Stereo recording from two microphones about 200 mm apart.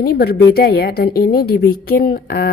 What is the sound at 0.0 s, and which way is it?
A woman's voice, 50° left (ahead or behind).